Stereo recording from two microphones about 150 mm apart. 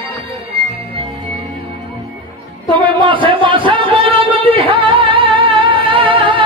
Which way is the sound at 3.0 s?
35° right (ahead or behind).